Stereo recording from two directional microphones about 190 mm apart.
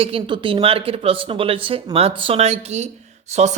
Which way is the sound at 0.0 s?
30° right (ahead or behind).